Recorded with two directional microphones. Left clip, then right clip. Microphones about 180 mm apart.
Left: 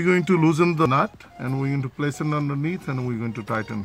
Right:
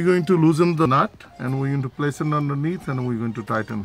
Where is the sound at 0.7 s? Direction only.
20° left (ahead or behind).